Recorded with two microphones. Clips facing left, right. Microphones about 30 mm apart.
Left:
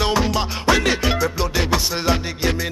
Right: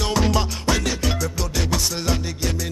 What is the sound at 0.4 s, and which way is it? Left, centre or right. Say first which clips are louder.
Music: left 4 dB; left.